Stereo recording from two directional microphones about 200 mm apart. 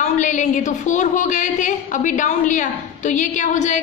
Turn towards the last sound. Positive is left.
turn(degrees=35)  # may be behind; listen again after turning